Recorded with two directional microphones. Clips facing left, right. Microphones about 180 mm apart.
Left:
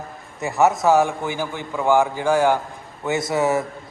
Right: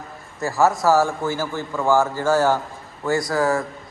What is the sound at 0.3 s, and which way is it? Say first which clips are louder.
A man's voice: left 1 dB; 20° left (ahead or behind).